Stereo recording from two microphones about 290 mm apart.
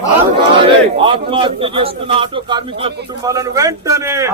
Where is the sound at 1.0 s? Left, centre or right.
Centre.